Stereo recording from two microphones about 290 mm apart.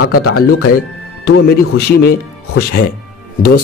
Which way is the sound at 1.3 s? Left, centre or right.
Left.